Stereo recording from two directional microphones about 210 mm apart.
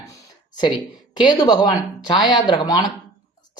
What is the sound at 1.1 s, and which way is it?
Speech, 20° left (ahead or behind).